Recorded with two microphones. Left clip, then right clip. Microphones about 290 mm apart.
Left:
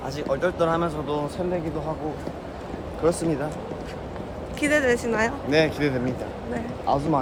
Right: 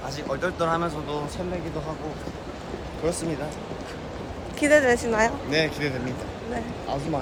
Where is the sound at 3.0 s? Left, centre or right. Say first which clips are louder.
Left 5 dB; centre.